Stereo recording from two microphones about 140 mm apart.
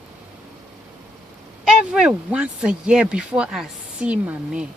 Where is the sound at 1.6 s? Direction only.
5° right (ahead or behind).